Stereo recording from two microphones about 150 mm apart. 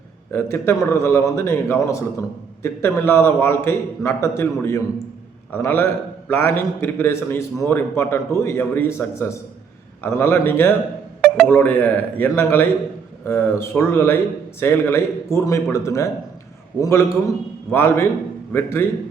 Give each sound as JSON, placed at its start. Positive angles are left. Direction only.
{"t": 0.3, "sound": "a man's voice", "side_deg": 15}